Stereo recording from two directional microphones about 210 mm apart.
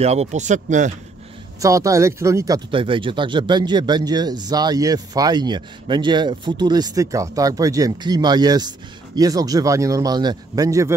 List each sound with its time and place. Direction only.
0.0 s speech: 30° right (ahead or behind)
1.6 s speech: 15° right (ahead or behind)